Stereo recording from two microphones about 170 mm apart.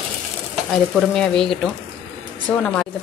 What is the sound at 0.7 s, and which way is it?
Speech, centre (ahead or behind).